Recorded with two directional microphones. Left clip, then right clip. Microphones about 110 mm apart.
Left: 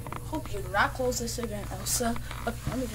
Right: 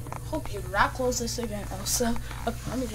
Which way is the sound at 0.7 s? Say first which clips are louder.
Right 2 dB; 10° right (ahead or behind).